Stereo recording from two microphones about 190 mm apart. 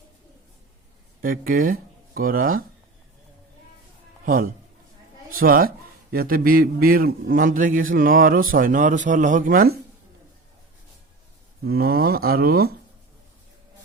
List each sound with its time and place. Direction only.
1.2 s speech: 45° right (ahead or behind)
4.3 s a man's voice: 50° right (ahead or behind)
11.6 s a man's voice: 55° right (ahead or behind)